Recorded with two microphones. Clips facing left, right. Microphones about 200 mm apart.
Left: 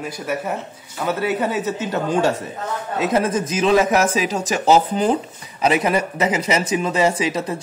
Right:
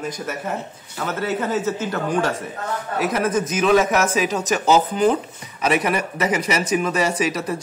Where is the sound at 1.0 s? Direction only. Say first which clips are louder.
Left 3 dB; 15° left (ahead or behind).